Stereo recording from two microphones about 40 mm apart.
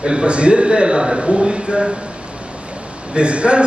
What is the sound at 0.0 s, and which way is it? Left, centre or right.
A man's voice, right.